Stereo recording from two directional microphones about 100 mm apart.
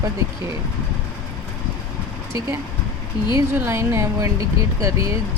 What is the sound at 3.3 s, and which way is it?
A woman's voice, 25° right (ahead or behind).